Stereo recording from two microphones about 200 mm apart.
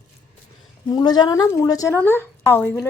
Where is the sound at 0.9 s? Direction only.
20° left (ahead or behind).